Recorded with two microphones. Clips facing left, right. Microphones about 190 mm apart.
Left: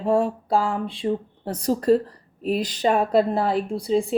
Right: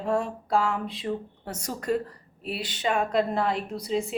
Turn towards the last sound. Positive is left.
turn(degrees=30)  # may be behind; listen again after turning